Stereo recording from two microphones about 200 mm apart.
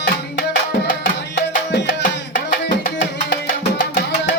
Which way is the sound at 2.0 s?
40° left (ahead or behind).